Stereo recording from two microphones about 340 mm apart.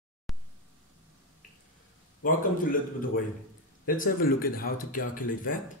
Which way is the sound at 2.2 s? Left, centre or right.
Left.